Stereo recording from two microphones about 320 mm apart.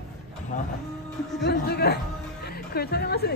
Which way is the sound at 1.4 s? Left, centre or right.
Left.